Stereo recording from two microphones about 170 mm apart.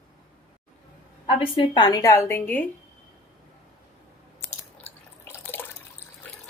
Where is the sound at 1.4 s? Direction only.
30° left (ahead or behind); by 2.7 s 10° left (ahead or behind).